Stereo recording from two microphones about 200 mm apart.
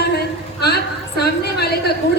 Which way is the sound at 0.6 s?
55° left (ahead or behind).